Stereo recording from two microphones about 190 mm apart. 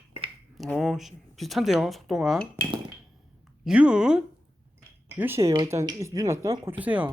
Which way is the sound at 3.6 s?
5° right (ahead or behind).